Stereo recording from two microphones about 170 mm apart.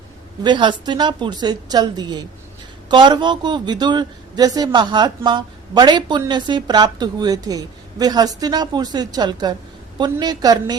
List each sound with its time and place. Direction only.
0.4 s speech: 25° right (ahead or behind)